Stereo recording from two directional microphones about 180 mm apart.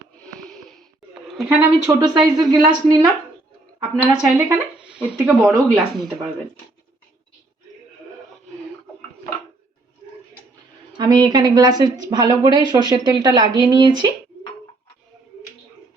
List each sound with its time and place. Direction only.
0.4 s wheeze: 5° left (ahead or behind)
1.5 s a woman's voice: 15° right (ahead or behind)
4.0 s speech: 10° right (ahead or behind)
10.9 s a woman's voice: 25° right (ahead or behind)